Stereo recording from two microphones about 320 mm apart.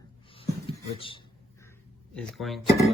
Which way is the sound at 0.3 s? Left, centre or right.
Centre.